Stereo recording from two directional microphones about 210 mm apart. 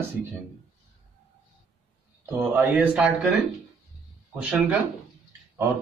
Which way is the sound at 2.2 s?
10° right (ahead or behind).